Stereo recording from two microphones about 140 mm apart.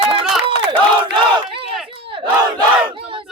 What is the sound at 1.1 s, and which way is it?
Battle cry, 35° right (ahead or behind).